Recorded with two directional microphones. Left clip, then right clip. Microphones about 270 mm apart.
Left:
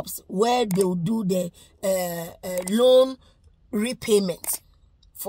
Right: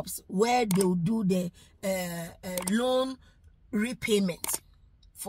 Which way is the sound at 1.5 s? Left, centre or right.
Centre.